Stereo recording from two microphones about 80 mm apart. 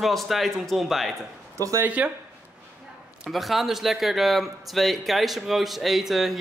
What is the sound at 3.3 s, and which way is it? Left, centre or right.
Speech, centre.